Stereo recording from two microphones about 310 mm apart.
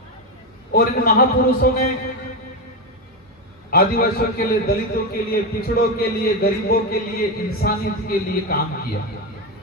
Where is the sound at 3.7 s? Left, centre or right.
Left.